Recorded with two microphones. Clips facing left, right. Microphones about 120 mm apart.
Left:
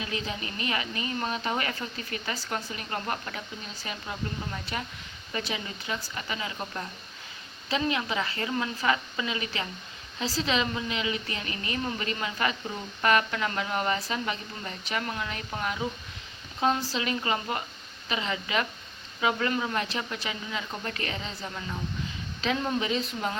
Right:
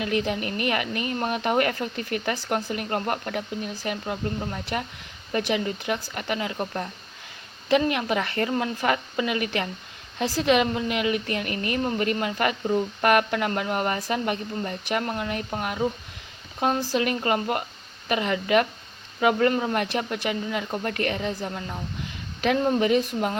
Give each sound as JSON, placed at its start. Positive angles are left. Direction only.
{"t": 0.0, "sound": "speech", "side_deg": -60}